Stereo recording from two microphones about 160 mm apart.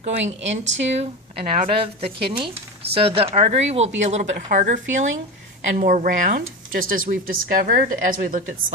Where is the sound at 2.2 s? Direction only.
35° right (ahead or behind); by 8.4 s 60° right (ahead or behind).